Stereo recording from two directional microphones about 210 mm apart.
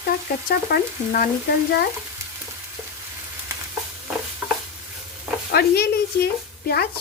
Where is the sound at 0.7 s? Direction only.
40° left (ahead or behind).